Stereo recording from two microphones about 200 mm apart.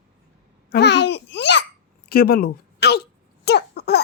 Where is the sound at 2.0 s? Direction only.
50° left (ahead or behind).